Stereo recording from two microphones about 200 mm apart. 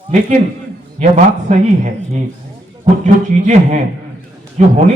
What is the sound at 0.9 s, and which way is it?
Speech, 35° right (ahead or behind).